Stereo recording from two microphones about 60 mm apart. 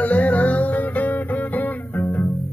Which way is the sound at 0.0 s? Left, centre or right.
Left.